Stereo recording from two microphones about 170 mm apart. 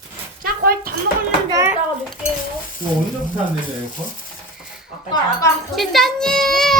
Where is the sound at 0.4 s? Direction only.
60° right (ahead or behind).